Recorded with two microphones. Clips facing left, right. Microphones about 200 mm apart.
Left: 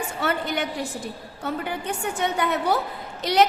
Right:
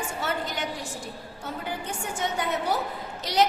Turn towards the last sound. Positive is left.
turn(degrees=60)  # may be behind; listen again after turning